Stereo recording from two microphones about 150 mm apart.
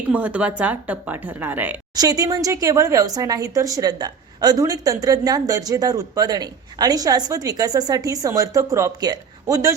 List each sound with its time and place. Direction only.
0.1 s a woman's voice: 10° right (ahead or behind)
2.0 s speech: 25° right (ahead or behind)